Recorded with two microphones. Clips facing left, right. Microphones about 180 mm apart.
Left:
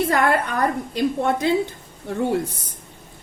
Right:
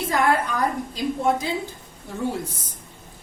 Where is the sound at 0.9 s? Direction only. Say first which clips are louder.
Left 2 dB; 65° left (ahead or behind).